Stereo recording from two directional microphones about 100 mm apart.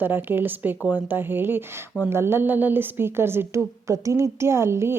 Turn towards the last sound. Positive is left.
turn(degrees=-25)  # may be behind; listen again after turning